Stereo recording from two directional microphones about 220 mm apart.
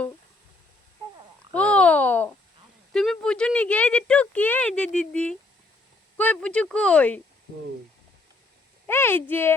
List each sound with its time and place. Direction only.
1.5 s a sound: 5° left (ahead or behind)
6.1 s speech: 5° left (ahead or behind)
8.9 s speech: 10° left (ahead or behind)